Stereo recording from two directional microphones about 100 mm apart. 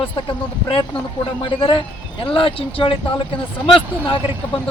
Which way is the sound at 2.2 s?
60° left (ahead or behind).